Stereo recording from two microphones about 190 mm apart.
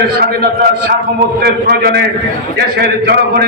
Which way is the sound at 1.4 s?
55° right (ahead or behind).